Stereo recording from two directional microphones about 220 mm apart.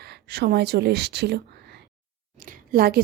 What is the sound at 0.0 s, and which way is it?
Speech, 45° right (ahead or behind).